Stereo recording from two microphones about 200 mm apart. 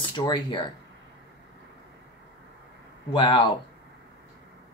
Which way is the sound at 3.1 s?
25° left (ahead or behind).